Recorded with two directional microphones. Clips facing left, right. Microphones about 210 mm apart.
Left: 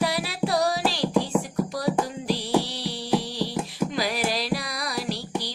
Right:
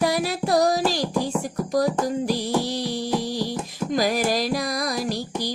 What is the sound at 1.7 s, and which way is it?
Music, 45° right (ahead or behind).